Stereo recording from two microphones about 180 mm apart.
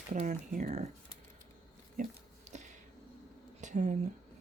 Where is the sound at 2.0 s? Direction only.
40° right (ahead or behind).